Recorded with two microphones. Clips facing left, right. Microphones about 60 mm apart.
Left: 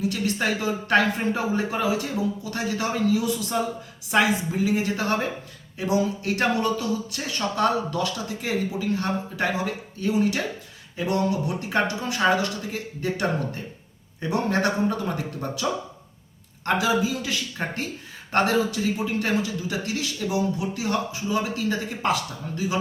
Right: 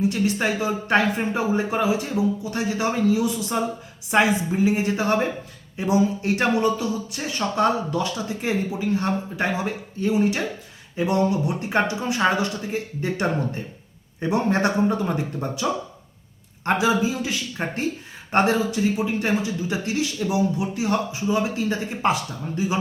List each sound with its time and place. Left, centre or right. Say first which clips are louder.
0.3 s speech: right 2 dB; right
17.6 s speech: right 3 dB; centre